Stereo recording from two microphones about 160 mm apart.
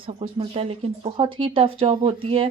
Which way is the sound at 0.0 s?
35° right (ahead or behind).